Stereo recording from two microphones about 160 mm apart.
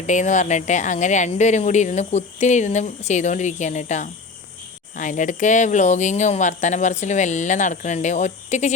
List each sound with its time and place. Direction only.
0.1 s speech: 50° left (ahead or behind)